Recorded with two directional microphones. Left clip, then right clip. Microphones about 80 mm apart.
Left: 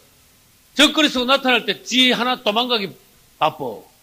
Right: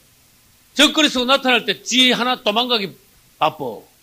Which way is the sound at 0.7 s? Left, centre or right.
Left.